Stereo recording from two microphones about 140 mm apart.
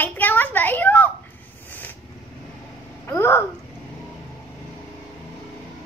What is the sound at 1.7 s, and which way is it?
Vehicle, 10° left (ahead or behind).